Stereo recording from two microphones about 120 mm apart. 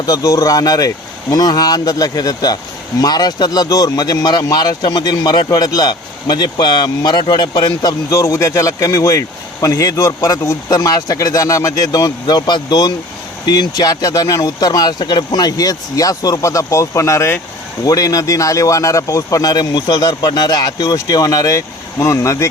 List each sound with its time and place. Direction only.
0.0 s speech: 30° left (ahead or behind)